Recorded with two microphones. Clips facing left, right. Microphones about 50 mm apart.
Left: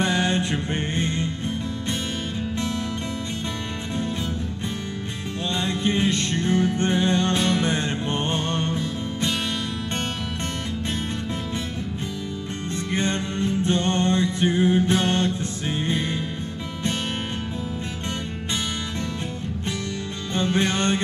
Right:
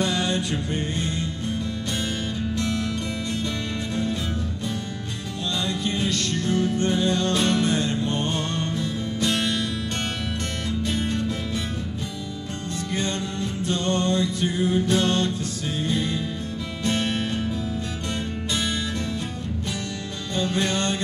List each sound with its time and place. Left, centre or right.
0.0 s music: left
5.5 s music: left
12.9 s music: left
20.3 s music: left